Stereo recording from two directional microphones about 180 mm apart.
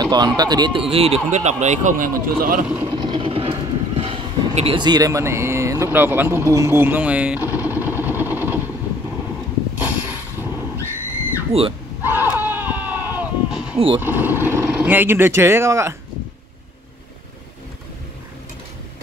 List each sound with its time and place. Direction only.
0.0 s speech: 25° right (ahead or behind); by 2.6 s 50° right (ahead or behind)
2.7 s train: 15° right (ahead or behind)
9.8 s a sound: 10° right (ahead or behind)
11.5 s speech: 30° right (ahead or behind)
12.0 s a sound: 10° right (ahead or behind)
13.7 s speech: 30° right (ahead or behind)
14.0 s speech: 10° right (ahead or behind)